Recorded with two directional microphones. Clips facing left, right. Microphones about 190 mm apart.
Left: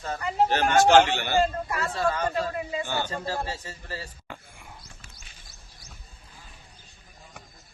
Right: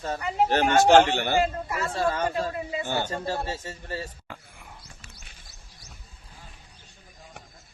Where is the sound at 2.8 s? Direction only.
50° right (ahead or behind).